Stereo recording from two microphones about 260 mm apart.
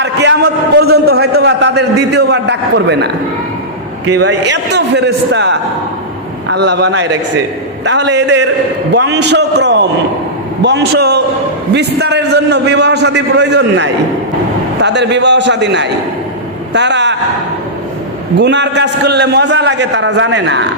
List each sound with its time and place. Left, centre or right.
0.0 s a man's voice: right
4.3 s a man's voice: right
18.3 s a man's voice: right